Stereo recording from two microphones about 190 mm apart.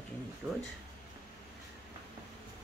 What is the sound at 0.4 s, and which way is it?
Speech, centre (ahead or behind).